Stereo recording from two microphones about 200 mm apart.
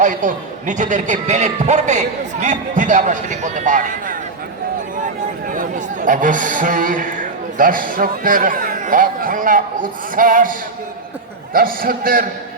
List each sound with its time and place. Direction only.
0.0 s a man's voice: 40° right (ahead or behind)
5.5 s a man's voice: 40° right (ahead or behind)